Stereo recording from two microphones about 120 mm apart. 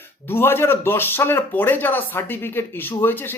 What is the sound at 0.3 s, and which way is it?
Speech, 20° left (ahead or behind).